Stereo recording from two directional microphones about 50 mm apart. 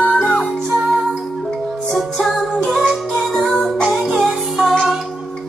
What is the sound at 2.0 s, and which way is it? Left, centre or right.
Music, centre.